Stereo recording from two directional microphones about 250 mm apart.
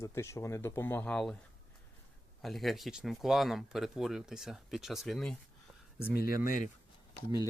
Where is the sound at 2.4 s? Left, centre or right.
Centre.